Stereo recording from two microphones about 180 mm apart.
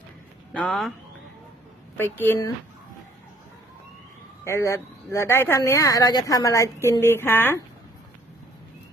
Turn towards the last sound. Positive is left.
turn(degrees=10)  # may be behind; listen again after turning